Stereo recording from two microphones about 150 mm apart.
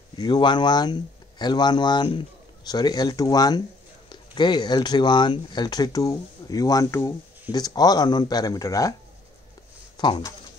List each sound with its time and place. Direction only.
0.2 s speech: 30° left (ahead or behind)
9.9 s speech: 30° left (ahead or behind)